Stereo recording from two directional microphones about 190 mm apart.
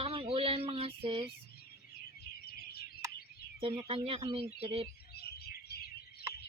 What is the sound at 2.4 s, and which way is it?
Bird, 55° left (ahead or behind).